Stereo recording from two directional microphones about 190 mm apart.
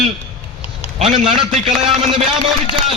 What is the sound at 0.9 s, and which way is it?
Speech, 30° right (ahead or behind).